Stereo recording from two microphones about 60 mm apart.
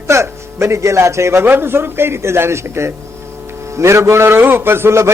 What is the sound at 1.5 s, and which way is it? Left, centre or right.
Speech, right.